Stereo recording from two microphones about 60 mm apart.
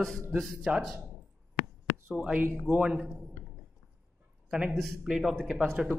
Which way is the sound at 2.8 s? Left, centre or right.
Centre.